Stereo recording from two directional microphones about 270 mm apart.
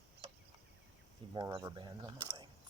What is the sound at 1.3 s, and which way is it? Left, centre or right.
Speech, centre.